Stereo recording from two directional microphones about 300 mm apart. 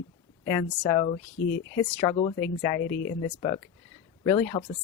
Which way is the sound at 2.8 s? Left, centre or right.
Left.